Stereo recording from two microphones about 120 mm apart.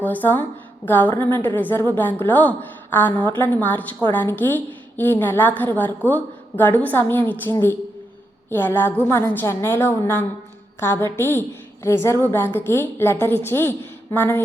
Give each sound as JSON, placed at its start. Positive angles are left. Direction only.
{"t": 0.0, "sound": "a woman's voice", "side_deg": 15}